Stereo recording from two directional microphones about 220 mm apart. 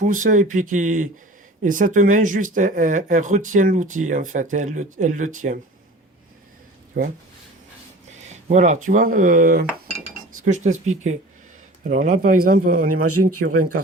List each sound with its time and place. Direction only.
0.0 s speech: 35° right (ahead or behind)
7.0 s speech: 40° right (ahead or behind)
8.3 s a sound: 35° right (ahead or behind)
8.9 s speech: 35° right (ahead or behind)
13.3 s speech: 90° right